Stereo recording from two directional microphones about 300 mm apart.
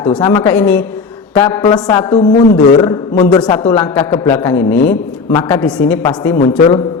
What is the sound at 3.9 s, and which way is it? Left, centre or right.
Speech, centre.